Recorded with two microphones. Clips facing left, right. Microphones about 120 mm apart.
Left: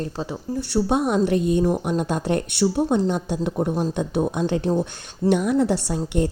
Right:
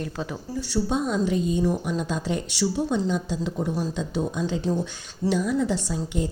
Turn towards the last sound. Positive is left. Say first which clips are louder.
# left 4 dB
turn(degrees=65)  # may be behind; listen again after turning